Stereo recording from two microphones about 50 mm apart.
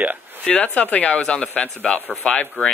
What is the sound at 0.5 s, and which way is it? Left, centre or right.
Speech, left.